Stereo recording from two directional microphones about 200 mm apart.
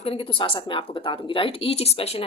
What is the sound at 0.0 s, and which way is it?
Speech, 30° left (ahead or behind).